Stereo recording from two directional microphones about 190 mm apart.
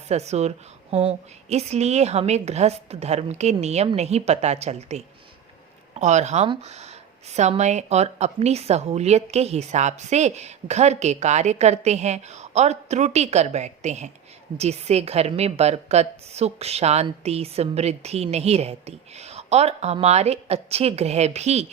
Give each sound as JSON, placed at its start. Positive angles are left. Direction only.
{"t": 0.1, "sound": "speech", "side_deg": -35}